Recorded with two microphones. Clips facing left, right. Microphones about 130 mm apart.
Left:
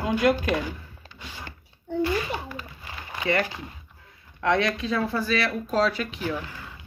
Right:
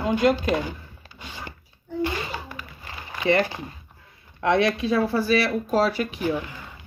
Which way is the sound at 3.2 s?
25° right (ahead or behind).